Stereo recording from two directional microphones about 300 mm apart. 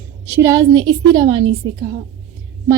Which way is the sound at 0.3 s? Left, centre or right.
Centre.